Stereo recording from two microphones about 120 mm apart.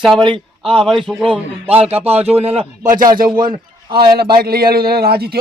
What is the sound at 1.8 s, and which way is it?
Speech, 55° right (ahead or behind).